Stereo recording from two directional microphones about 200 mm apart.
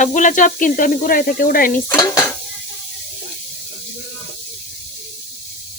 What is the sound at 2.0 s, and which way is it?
Dishes, 15° left (ahead or behind).